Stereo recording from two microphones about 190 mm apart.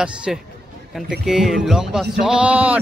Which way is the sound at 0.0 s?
5° right (ahead or behind).